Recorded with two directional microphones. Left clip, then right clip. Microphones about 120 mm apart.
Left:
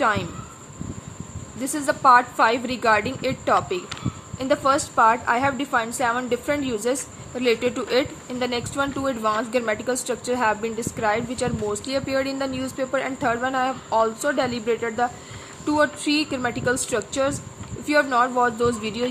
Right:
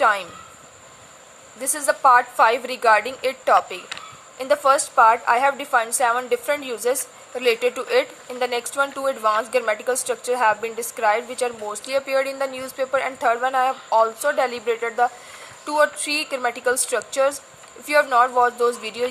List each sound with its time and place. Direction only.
0.0 s a woman's voice: 35° right (ahead or behind)
1.6 s a woman's voice: 40° right (ahead or behind)